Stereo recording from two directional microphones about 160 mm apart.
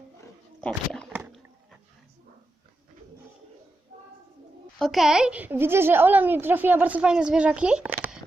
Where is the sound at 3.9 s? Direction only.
45° right (ahead or behind).